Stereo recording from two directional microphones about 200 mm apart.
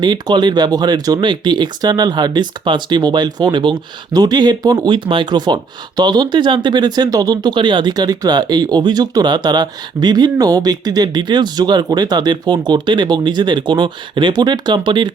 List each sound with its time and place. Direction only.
0.0 s speech: 20° right (ahead or behind)